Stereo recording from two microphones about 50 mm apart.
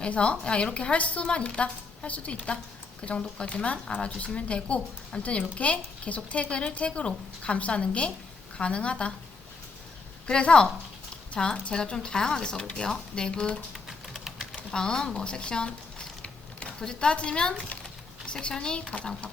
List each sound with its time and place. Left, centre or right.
0.0 s speech: left
10.2 s speech: centre
13.8 s typing: centre
14.7 s speech: centre
18.9 s speech: left